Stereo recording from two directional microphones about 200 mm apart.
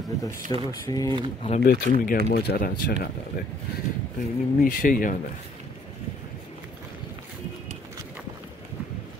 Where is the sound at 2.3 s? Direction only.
50° left (ahead or behind).